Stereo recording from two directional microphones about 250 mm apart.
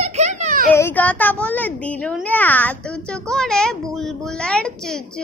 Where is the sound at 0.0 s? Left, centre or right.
Right.